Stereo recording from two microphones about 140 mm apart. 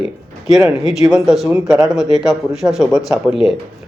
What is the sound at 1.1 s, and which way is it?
Speech, 5° right (ahead or behind).